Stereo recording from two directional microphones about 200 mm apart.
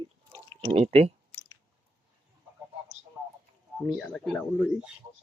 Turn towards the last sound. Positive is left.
turn(degrees=0)  # may be behind; listen again after turning